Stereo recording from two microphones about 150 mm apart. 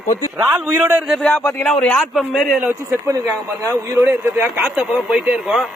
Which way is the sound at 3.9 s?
20° right (ahead or behind).